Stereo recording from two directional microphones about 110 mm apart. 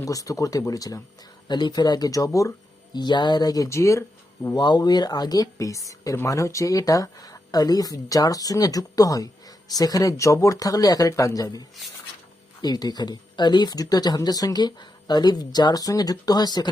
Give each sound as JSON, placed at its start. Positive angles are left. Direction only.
{"t": 0.0, "sound": "speech", "side_deg": 30}
{"t": 2.9, "sound": "speech", "side_deg": 40}
{"t": 4.5, "sound": "speech", "side_deg": 40}
{"t": 12.6, "sound": "speech", "side_deg": 35}